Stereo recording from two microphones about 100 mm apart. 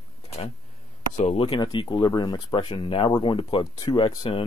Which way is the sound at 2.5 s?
70° left (ahead or behind).